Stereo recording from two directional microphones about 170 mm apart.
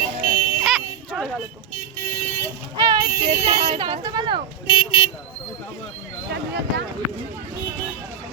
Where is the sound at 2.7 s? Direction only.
25° right (ahead or behind).